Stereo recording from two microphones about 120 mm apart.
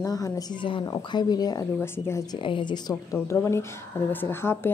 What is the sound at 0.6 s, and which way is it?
Speech, 45° left (ahead or behind).